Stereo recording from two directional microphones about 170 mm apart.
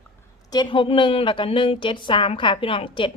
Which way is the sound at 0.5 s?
25° left (ahead or behind).